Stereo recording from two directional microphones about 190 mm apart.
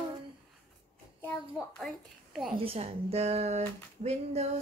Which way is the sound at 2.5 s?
30° right (ahead or behind).